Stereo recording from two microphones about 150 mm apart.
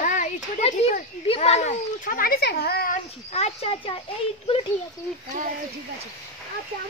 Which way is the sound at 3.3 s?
45° left (ahead or behind).